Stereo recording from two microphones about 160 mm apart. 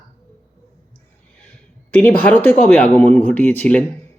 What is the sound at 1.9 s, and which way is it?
A man's voice, 10° left (ahead or behind).